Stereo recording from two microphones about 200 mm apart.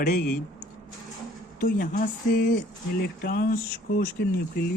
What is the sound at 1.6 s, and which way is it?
Speech, 40° left (ahead or behind).